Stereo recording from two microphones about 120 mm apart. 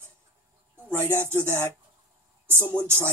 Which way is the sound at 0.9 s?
20° right (ahead or behind).